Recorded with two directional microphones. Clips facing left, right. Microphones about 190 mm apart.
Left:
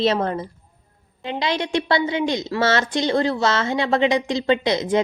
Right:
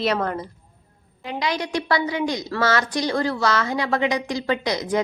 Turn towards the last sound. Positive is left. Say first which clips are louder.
# left 3 dB
turn(degrees=25)  # may be behind; listen again after turning